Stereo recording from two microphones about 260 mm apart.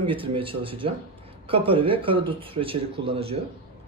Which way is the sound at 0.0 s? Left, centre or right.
Centre.